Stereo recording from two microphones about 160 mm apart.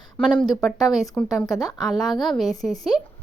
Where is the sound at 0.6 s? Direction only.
Centre (ahead or behind).